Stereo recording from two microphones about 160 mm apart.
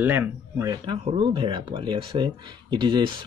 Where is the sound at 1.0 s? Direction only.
35° right (ahead or behind).